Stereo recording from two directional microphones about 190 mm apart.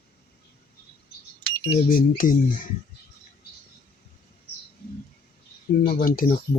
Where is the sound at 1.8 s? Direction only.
45° left (ahead or behind).